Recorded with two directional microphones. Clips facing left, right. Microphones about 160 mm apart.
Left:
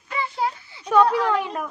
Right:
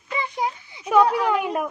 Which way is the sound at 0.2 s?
15° right (ahead or behind).